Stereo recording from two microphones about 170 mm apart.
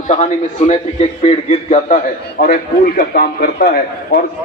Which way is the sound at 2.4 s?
60° left (ahead or behind).